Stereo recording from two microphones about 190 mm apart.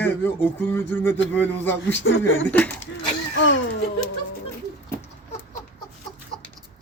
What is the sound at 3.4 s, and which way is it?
Speech, 90° left.